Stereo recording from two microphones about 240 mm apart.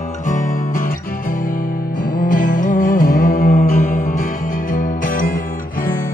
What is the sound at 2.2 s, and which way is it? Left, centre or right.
Music, left.